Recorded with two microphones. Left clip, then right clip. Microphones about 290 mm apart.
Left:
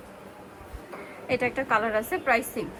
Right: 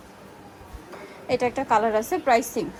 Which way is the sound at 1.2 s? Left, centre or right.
Centre.